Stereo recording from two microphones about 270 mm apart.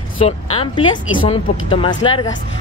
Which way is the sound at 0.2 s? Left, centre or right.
Left.